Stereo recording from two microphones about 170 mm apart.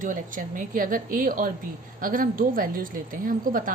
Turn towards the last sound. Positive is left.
turn(degrees=-55)  # may be behind; listen again after turning